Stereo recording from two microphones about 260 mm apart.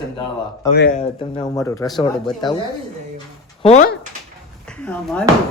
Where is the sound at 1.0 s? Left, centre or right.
Centre.